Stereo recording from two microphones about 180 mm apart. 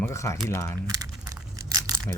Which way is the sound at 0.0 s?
15° left (ahead or behind).